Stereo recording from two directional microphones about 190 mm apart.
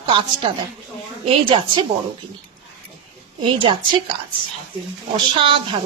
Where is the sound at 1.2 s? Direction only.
30° right (ahead or behind).